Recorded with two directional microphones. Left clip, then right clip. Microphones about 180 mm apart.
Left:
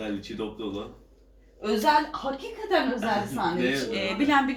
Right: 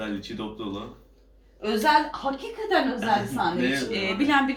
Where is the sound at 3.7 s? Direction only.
15° left (ahead or behind).